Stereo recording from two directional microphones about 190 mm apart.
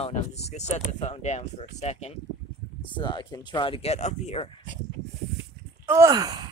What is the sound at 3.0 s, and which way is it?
Speech, 25° left (ahead or behind).